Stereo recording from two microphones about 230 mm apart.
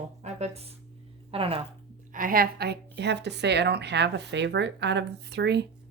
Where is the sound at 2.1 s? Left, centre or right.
Right.